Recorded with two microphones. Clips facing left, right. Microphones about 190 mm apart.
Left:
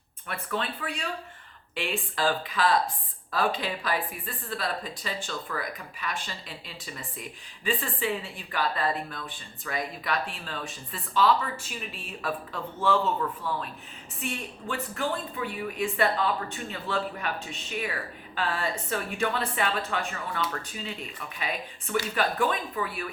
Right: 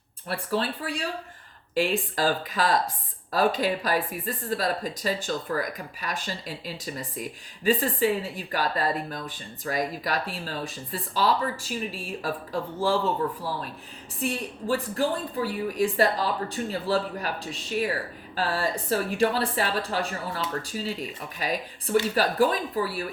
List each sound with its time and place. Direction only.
0.3 s speech: 35° right (ahead or behind)